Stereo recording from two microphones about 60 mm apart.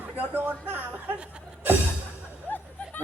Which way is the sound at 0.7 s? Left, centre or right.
Right.